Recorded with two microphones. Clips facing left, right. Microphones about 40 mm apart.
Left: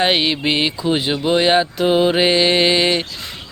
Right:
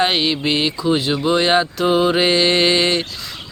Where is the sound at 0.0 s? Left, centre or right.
Centre.